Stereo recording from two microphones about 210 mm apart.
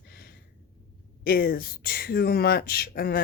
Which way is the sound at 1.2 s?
45° left (ahead or behind).